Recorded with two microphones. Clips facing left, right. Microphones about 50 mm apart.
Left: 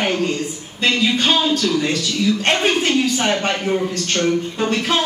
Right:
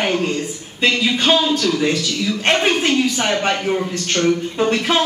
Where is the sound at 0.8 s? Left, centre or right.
Centre.